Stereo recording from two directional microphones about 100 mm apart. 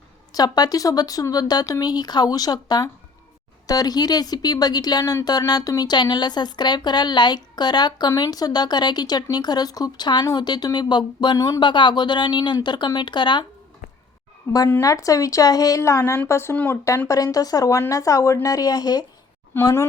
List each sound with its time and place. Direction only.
0.3 s speech: 40° left (ahead or behind)
11.6 s speech: 50° left (ahead or behind)
14.5 s speech: 35° left (ahead or behind)
17.1 s speech: 35° left (ahead or behind)
19.5 s speech: 25° left (ahead or behind)